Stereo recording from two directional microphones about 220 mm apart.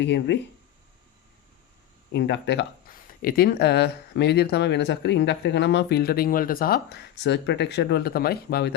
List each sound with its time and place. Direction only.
0.0 s speech: 55° left (ahead or behind)
2.1 s speech: 55° left (ahead or behind)